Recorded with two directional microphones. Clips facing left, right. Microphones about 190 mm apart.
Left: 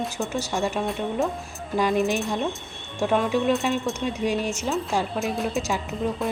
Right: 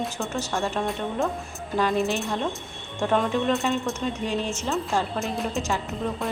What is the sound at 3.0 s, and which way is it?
A woman's voice, 5° left (ahead or behind).